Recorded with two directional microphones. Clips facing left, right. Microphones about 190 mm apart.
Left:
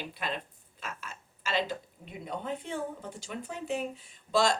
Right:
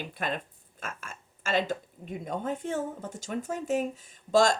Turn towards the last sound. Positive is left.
turn(degrees=-45)  # may be behind; listen again after turning